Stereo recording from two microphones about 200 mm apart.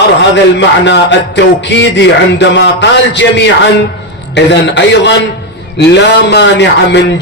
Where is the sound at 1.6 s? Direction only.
60° left (ahead or behind).